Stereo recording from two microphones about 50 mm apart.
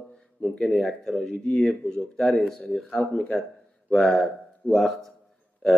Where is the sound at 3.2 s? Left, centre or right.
Centre.